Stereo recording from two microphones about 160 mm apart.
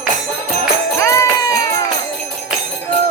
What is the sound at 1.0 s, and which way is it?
Music, 20° left (ahead or behind).